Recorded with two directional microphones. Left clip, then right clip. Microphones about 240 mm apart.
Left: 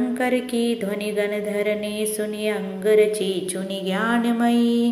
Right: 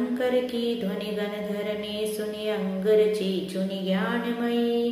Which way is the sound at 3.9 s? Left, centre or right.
Left.